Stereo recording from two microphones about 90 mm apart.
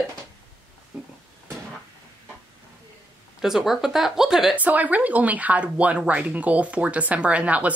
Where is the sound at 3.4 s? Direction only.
5° right (ahead or behind).